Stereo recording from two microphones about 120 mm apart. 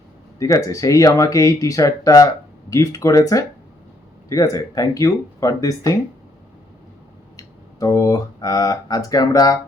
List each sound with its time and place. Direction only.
0.3 s speech: 30° left (ahead or behind)
7.3 s speech: 30° left (ahead or behind)